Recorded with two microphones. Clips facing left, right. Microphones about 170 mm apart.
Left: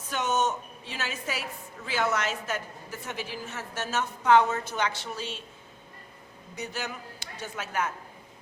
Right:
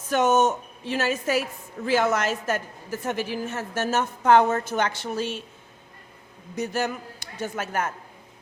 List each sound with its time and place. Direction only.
0.1 s a woman's voice: 45° right (ahead or behind)
6.6 s a woman's voice: 45° right (ahead or behind)